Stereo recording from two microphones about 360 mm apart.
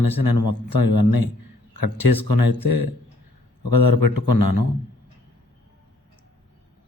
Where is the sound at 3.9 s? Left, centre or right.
Left.